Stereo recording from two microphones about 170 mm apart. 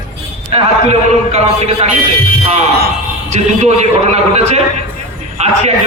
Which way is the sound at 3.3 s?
40° right (ahead or behind).